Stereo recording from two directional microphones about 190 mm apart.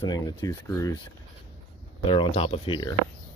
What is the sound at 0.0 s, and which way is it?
Speech, 20° left (ahead or behind).